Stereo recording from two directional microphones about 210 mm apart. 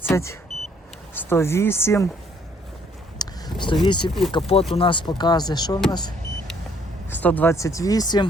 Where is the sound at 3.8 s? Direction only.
20° left (ahead or behind).